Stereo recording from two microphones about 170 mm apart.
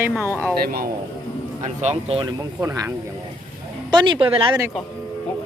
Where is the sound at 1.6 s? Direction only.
40° right (ahead or behind).